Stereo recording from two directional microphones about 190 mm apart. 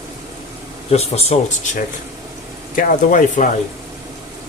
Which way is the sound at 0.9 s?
35° left (ahead or behind).